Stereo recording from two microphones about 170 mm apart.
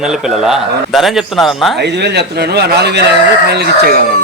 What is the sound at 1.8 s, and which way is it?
Speech, 85° right.